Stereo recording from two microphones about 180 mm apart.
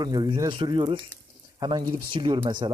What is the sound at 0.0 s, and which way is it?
Speech, 25° right (ahead or behind).